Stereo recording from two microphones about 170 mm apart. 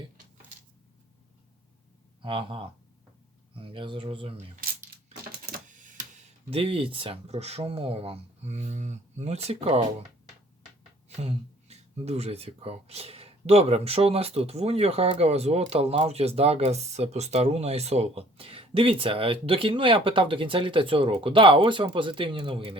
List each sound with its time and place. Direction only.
2.2 s speech: 30° right (ahead or behind)
5.0 s typewriter: 50° right (ahead or behind)
6.5 s speech: 30° right (ahead or behind)
11.1 s speech: 40° right (ahead or behind)